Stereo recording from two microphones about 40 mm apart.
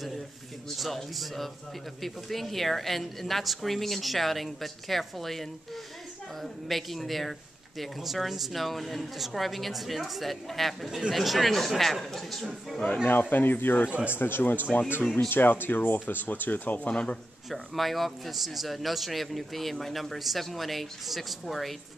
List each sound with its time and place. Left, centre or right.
0.7 s speech: centre
12.8 s speech: left
15.2 s speech: left
16.8 s a man's voice: left
17.5 s speech: centre